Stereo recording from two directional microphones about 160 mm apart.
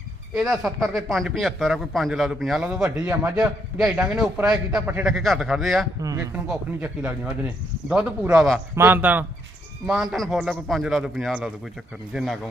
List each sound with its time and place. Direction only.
0.5 s a man's voice: centre (ahead or behind)
6.0 s speech: 20° right (ahead or behind)
6.3 s a man's voice: 5° right (ahead or behind)
8.7 s a man's voice: 15° right (ahead or behind)